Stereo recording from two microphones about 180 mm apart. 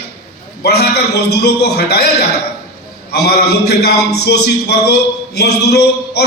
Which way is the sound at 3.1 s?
65° left (ahead or behind).